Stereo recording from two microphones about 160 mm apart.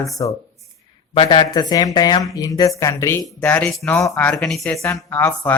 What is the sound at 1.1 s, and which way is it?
A woman's voice, 30° left (ahead or behind).